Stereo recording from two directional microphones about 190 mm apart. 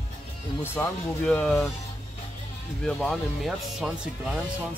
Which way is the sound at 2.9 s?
Centre (ahead or behind).